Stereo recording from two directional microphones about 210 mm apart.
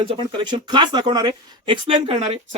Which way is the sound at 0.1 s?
25° right (ahead or behind).